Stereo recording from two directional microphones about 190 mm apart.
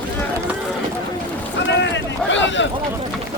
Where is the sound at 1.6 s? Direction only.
70° left (ahead or behind).